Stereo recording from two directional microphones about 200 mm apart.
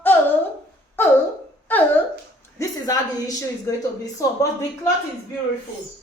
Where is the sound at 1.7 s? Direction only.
10° left (ahead or behind).